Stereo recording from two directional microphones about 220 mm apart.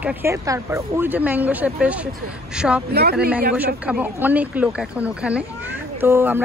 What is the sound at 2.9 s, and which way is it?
Speech, 45° right (ahead or behind).